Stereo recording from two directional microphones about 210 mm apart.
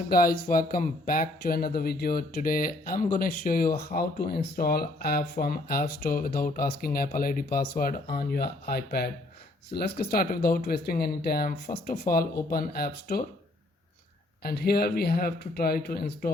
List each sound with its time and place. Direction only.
0.1 s speech: 45° left (ahead or behind)
14.4 s speech: 45° left (ahead or behind)